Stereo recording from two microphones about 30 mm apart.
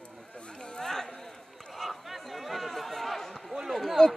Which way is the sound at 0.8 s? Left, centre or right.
Centre.